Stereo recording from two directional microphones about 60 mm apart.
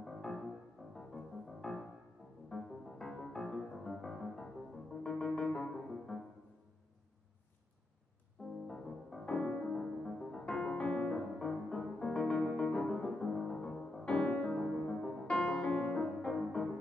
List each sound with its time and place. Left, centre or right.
0.0 s music: centre
5.0 s keyboard: centre
8.6 s music: centre
14.2 s music: left
14.5 s music: centre
14.8 s music: centre